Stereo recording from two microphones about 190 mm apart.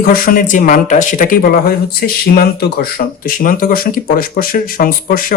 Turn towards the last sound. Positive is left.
turn(degrees=45)  # may be behind; listen again after turning